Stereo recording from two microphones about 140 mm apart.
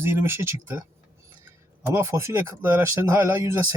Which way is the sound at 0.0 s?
15° right (ahead or behind).